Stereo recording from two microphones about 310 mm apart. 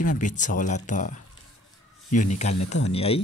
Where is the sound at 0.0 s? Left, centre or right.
Left.